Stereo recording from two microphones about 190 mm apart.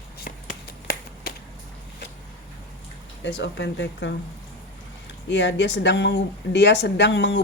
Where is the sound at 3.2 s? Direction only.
65° left (ahead or behind).